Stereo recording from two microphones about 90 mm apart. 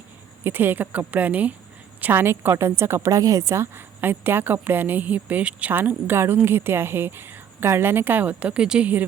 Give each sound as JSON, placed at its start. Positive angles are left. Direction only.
{"t": 0.4, "sound": "a woman's voice", "side_deg": -20}